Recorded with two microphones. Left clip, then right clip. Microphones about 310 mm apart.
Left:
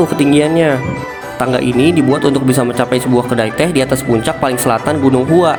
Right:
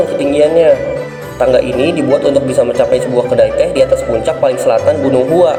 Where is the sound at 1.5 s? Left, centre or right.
Left.